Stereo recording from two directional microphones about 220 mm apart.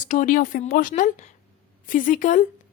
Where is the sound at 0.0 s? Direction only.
35° left (ahead or behind).